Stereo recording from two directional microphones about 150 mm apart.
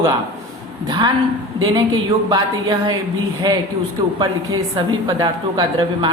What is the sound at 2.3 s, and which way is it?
A woman's voice, 30° right (ahead or behind).